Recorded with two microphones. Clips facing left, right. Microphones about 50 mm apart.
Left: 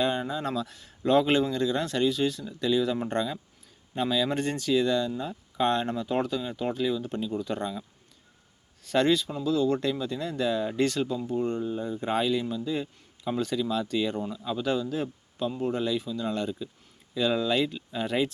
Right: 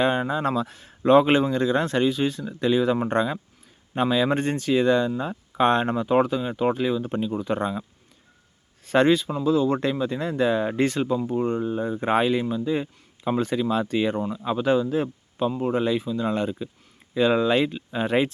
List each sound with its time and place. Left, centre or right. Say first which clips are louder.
0.0 s speech: right 5 dB; right